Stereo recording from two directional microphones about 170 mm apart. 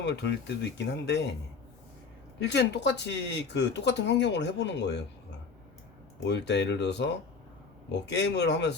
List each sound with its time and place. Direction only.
0.0 s speech: 90° left
2.4 s speech: 90° left
6.2 s speech: 90° left